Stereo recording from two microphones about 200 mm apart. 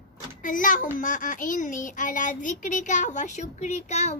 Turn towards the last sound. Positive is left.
turn(degrees=35)  # may be behind; listen again after turning